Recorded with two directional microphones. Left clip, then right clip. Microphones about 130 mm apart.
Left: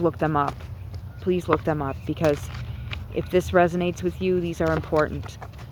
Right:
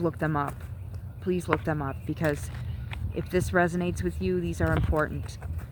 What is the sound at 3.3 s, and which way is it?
Speech, 35° right (ahead or behind).